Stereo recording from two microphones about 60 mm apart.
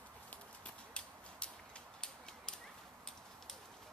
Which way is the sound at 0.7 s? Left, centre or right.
Centre.